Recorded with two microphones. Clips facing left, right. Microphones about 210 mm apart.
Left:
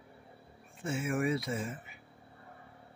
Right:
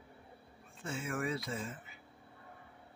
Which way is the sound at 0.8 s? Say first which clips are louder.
Left 6 dB; 20° left (ahead or behind).